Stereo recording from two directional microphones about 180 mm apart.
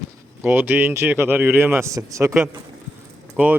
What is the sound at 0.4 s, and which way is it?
A man's voice, 10° right (ahead or behind).